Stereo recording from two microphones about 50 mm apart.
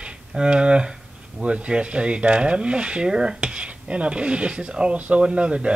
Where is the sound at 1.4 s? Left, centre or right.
Right.